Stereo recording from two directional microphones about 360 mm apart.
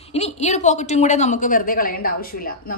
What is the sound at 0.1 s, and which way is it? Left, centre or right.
A woman's voice, centre.